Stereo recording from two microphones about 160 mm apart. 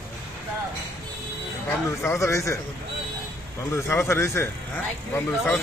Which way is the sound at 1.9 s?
15° left (ahead or behind).